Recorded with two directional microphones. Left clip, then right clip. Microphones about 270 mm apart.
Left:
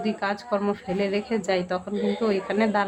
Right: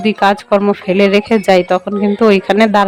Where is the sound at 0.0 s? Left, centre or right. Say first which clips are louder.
Right 15 dB; right.